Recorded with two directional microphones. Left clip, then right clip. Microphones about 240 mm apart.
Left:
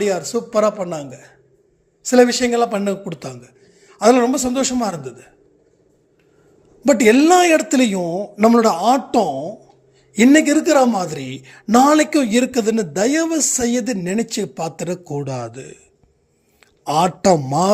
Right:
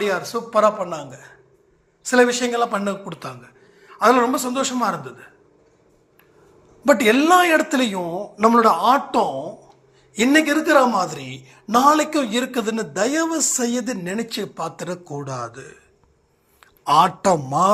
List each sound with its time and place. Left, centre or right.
0.0 s a woman's voice: left
6.8 s a woman's voice: left